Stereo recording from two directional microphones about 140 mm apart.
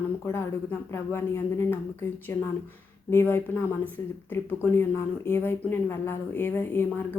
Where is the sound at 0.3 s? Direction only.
20° left (ahead or behind).